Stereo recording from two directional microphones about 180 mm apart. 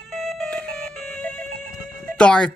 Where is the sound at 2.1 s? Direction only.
5° left (ahead or behind).